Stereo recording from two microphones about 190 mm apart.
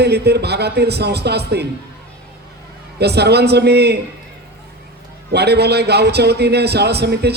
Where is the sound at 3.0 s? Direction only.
60° right (ahead or behind).